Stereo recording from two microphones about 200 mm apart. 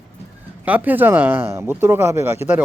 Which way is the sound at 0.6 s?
10° right (ahead or behind).